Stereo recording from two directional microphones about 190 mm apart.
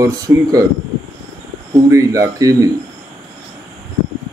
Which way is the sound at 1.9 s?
15° right (ahead or behind).